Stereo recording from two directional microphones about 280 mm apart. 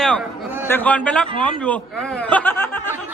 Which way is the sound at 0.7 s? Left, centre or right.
Centre.